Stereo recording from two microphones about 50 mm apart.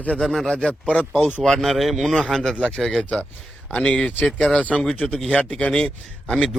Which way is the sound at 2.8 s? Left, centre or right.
Centre.